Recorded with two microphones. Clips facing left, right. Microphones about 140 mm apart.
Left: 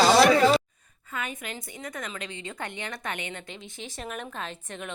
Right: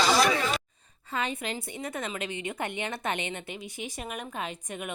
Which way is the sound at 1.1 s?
30° right (ahead or behind).